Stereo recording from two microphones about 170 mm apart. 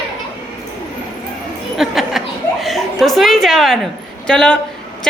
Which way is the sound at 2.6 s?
Centre (ahead or behind).